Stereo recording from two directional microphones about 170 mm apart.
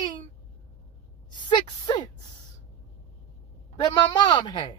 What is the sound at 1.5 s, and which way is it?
Speech, 25° left (ahead or behind).